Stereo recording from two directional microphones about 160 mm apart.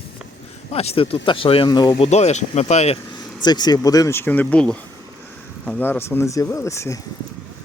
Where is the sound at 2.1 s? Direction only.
45° left (ahead or behind).